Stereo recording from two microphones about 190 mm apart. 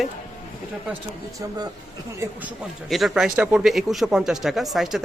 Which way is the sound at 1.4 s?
20° right (ahead or behind).